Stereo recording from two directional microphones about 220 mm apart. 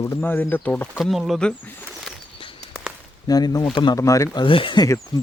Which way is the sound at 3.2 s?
15° left (ahead or behind).